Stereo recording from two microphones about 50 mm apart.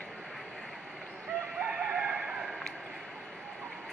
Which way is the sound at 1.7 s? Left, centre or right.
Right.